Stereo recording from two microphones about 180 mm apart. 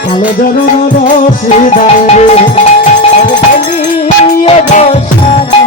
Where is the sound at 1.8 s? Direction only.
35° left (ahead or behind).